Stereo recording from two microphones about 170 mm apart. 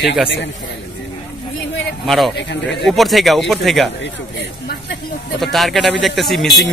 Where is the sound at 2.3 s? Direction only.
90° left.